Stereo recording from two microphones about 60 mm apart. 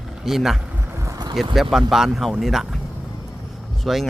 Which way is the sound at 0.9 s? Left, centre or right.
Right.